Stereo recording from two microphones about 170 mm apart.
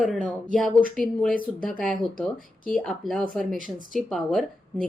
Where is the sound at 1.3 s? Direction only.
55° left (ahead or behind).